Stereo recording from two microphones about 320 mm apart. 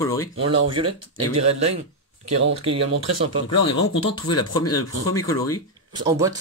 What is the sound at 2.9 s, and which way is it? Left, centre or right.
Speech, right.